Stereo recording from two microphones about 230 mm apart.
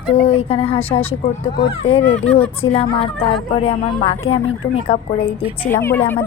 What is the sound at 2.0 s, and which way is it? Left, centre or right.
Speech, centre.